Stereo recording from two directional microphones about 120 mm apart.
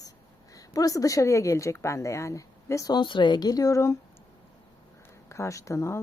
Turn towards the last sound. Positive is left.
turn(degrees=25)  # may be behind; listen again after turning